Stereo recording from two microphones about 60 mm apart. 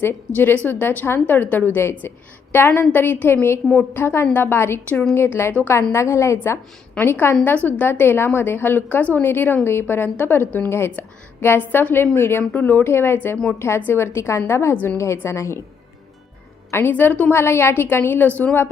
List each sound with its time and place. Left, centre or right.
0.3 s a woman's voice: left
4.0 s a woman's voice: left
5.9 s a woman's voice: left
7.5 s a woman's voice: left
12.4 s a woman's voice: left
13.6 s a woman's voice: left
16.9 s a woman's voice: left
17.3 s a woman's voice: left